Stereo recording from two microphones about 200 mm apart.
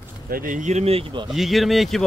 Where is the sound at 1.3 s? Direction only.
Centre (ahead or behind).